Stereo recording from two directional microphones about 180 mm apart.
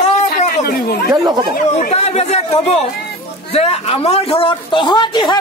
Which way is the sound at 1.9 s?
35° left (ahead or behind).